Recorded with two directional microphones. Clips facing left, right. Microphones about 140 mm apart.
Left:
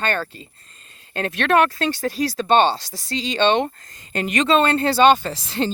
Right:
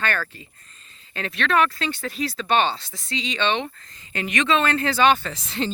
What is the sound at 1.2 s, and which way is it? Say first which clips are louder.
Speech: left 4 dB; 45° left (ahead or behind).